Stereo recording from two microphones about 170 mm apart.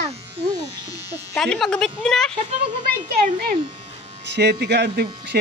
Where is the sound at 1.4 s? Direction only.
5° left (ahead or behind).